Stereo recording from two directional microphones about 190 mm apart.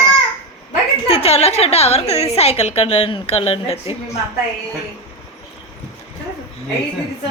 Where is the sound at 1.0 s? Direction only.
30° left (ahead or behind).